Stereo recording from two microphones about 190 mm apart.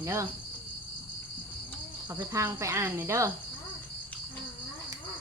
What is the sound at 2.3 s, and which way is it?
Speech, 15° right (ahead or behind).